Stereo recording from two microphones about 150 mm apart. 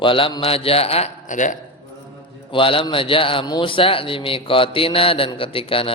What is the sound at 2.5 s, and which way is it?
A man's voice, 35° left (ahead or behind).